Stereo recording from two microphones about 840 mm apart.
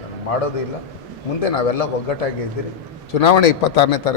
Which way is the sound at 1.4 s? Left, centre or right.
Left.